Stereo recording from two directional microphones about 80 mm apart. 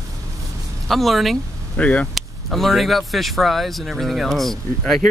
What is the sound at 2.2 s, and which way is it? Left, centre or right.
Speech, centre.